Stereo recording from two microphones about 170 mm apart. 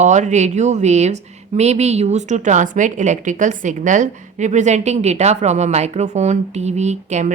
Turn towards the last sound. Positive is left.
turn(degrees=-45)  # may be behind; listen again after turning